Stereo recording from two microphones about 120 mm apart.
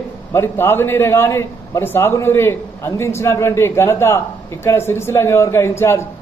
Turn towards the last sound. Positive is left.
turn(degrees=20)  # may be behind; listen again after turning